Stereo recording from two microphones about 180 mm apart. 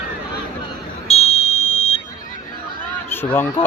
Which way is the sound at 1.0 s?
35° left (ahead or behind).